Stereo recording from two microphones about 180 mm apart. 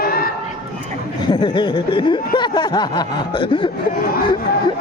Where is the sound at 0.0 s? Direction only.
55° left (ahead or behind).